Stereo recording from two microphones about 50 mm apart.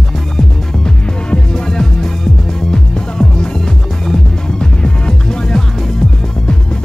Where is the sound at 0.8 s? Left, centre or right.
Centre.